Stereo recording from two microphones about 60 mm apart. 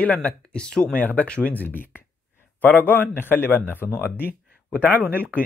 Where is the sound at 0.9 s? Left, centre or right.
Left.